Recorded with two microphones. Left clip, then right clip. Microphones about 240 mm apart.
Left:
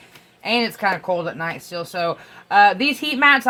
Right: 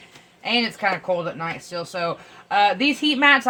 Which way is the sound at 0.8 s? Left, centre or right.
Left.